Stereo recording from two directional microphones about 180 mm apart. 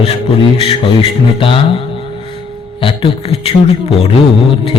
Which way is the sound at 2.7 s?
30° left (ahead or behind).